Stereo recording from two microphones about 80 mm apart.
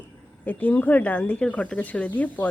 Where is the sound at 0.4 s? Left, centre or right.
Centre.